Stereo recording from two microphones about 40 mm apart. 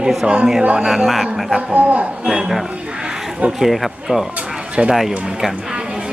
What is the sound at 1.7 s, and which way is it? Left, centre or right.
Speech, right.